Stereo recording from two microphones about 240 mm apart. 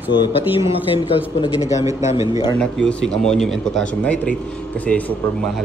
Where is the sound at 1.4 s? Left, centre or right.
Centre.